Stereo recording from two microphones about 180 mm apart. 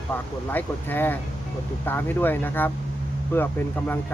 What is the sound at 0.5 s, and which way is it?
Speech, 10° left (ahead or behind).